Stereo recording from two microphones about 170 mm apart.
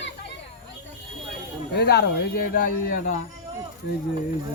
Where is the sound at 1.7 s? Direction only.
75° left (ahead or behind); by 3.2 s 55° left (ahead or behind).